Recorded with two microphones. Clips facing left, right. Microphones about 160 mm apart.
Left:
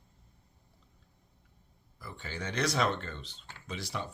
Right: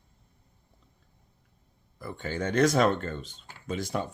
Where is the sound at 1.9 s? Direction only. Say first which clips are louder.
Right 9 dB; 50° right (ahead or behind).